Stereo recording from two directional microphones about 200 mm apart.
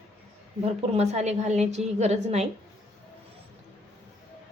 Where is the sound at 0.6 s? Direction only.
30° right (ahead or behind).